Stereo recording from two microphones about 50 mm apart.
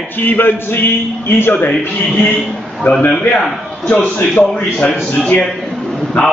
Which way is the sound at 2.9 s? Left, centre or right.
Left.